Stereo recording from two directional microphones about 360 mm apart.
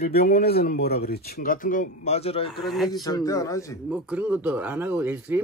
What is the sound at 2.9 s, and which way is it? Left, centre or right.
Speech, centre.